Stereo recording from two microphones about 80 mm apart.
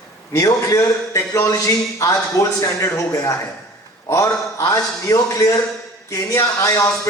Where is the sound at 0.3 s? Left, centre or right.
Left.